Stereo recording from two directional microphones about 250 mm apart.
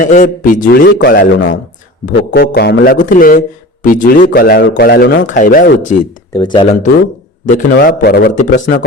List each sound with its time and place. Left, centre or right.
0.0 s a man's voice: left
6.3 s speech: centre
7.4 s a man's voice: left
8.5 s speech: left